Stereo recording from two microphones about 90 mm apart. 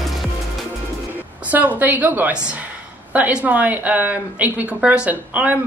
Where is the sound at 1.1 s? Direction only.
20° right (ahead or behind).